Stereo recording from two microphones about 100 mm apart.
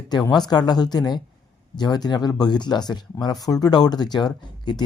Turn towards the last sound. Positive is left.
turn(degrees=45)  # may be behind; listen again after turning